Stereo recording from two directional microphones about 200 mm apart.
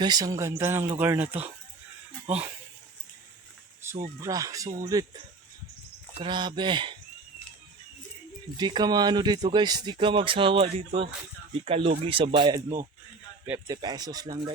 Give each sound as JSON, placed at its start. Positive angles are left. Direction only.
{"t": 0.0, "sound": "speech", "side_deg": -20}
{"t": 3.8, "sound": "a sound", "side_deg": -15}
{"t": 4.2, "sound": "speech", "side_deg": -15}
{"t": 6.1, "sound": "speech", "side_deg": -25}
{"t": 8.5, "sound": "speech", "side_deg": -20}
{"t": 13.7, "sound": "speech", "side_deg": -20}